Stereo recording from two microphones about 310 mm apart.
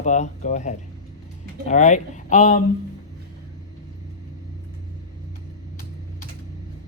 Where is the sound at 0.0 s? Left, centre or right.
Left.